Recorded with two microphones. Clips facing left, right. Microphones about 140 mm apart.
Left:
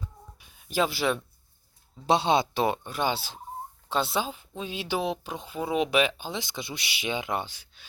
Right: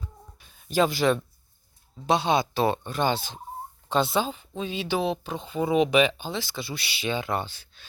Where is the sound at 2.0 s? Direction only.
30° left (ahead or behind).